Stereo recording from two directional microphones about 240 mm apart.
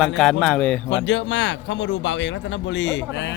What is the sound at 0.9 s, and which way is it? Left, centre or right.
Speech, left.